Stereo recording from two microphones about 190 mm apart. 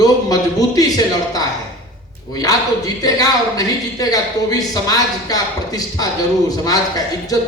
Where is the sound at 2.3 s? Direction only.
20° left (ahead or behind).